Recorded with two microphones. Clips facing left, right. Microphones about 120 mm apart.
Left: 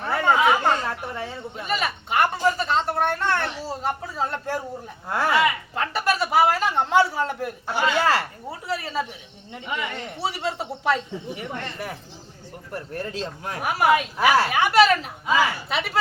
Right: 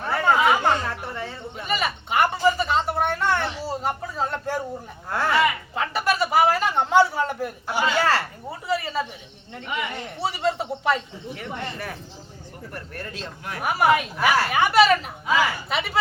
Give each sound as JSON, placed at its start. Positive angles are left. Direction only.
{"t": 0.0, "sound": "chatter", "side_deg": 0}
{"t": 0.9, "sound": "a sound", "side_deg": 10}
{"t": 5.0, "sound": "speech", "side_deg": 10}
{"t": 5.7, "sound": "a sound", "side_deg": 0}
{"t": 9.5, "sound": "speech", "side_deg": 10}
{"t": 9.7, "sound": "a man's voice", "side_deg": 0}
{"t": 11.3, "sound": "speech", "side_deg": 20}
{"t": 13.6, "sound": "speech", "side_deg": 0}
{"t": 15.7, "sound": "a sound", "side_deg": 0}